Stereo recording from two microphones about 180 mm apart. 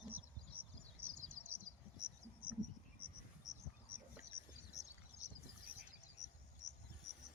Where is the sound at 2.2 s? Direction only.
10° right (ahead or behind).